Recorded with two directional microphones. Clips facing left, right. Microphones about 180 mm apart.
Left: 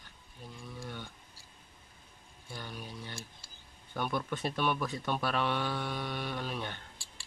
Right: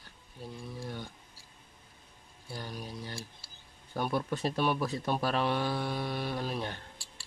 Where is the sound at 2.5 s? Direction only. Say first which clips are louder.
Right 3 dB; 35° right (ahead or behind).